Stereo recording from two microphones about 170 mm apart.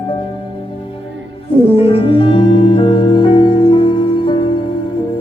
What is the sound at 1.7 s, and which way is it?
Music, 35° left (ahead or behind).